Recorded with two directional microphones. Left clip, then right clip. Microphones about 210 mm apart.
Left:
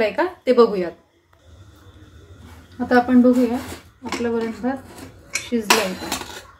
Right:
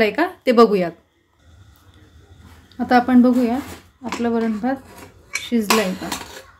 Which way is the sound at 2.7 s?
50° right (ahead or behind).